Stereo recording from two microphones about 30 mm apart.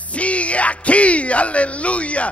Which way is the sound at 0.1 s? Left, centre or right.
Left.